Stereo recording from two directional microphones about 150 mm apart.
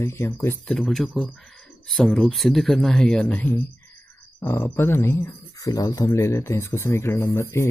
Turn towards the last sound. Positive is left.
turn(degrees=20)  # may be behind; listen again after turning